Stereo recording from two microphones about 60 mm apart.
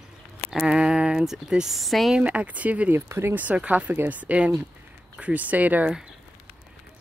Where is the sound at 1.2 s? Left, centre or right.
Centre.